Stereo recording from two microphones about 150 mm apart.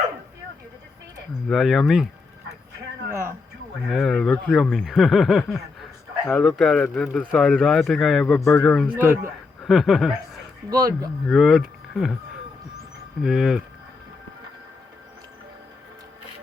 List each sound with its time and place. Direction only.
1.5 s speech: centre (ahead or behind)
3.1 s a sound: 15° right (ahead or behind)
3.8 s speech: centre (ahead or behind)
6.2 s speech: 10° left (ahead or behind)
10.7 s speech: 25° right (ahead or behind)
11.3 s speech: centre (ahead or behind)
13.2 s speech: 5° right (ahead or behind)